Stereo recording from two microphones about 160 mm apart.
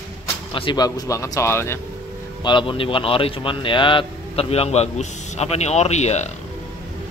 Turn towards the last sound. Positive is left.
turn(degrees=45)  # may be behind; listen again after turning